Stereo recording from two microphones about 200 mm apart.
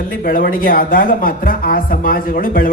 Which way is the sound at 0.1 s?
45° left (ahead or behind).